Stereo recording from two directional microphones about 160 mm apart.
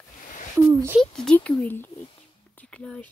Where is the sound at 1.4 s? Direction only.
10° left (ahead or behind).